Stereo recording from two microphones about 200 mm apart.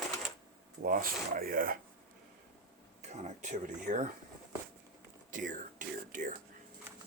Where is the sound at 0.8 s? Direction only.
45° right (ahead or behind).